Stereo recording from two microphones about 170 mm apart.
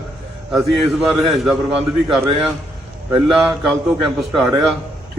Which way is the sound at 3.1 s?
Centre (ahead or behind).